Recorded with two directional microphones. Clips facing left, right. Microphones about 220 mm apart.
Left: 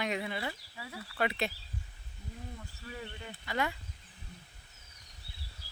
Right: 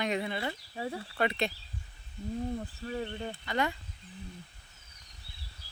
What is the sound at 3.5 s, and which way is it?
Speech, 5° left (ahead or behind).